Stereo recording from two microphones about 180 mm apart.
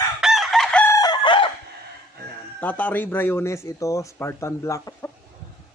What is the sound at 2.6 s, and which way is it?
Speech, 10° left (ahead or behind).